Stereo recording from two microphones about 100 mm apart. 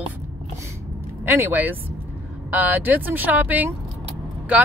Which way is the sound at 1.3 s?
20° right (ahead or behind).